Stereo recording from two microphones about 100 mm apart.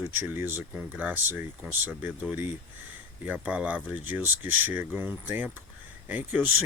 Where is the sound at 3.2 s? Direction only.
15° right (ahead or behind).